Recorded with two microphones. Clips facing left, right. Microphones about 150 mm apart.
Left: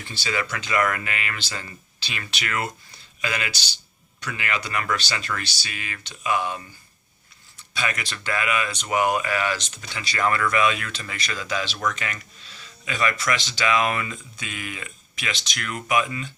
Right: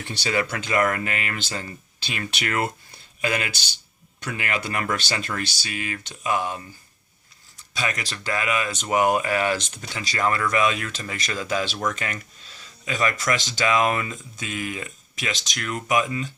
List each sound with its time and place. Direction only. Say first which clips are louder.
0.0 s speech: right 4 dB; 65° right (ahead or behind)
0.3 s speech: right 3 dB; 45° right (ahead or behind)
0.7 s speech: right 1 dB; 35° right (ahead or behind)
7.7 s speech: even; 40° right (ahead or behind)